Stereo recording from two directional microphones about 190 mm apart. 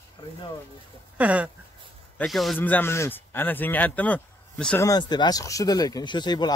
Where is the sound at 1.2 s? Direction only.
10° right (ahead or behind).